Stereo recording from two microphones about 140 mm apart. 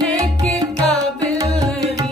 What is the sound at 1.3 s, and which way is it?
Music, 25° right (ahead or behind).